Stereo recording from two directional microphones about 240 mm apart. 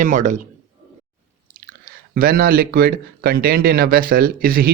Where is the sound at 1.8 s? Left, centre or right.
Right.